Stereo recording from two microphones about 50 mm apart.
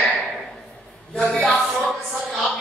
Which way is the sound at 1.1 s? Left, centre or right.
Centre.